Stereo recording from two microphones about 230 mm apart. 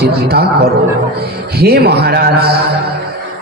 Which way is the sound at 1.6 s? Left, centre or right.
Right.